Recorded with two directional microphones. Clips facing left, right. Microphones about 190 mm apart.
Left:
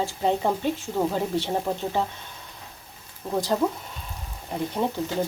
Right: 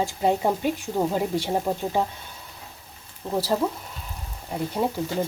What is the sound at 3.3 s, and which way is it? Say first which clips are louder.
Speech: even; 5° right (ahead or behind).